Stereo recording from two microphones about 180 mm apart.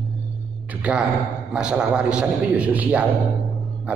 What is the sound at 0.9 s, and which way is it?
A man's voice, 5° right (ahead or behind).